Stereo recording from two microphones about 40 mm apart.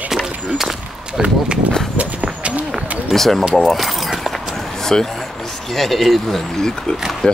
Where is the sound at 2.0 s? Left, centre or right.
Right.